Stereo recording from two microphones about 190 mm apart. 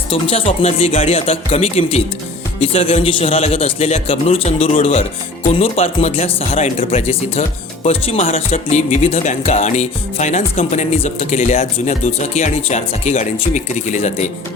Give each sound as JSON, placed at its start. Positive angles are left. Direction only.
{"t": 0.1, "sound": "speech", "side_deg": 30}